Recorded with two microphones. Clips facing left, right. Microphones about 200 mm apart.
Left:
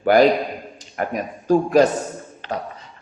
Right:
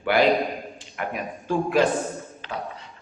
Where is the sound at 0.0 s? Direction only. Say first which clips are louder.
Left 5 dB; 40° left (ahead or behind).